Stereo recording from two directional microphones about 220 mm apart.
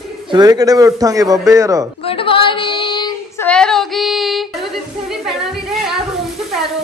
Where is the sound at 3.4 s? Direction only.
5° left (ahead or behind).